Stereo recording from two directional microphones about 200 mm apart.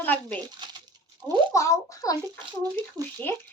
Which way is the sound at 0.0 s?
10° left (ahead or behind).